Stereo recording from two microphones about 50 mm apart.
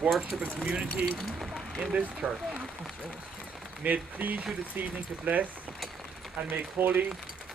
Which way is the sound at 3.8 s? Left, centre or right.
Right.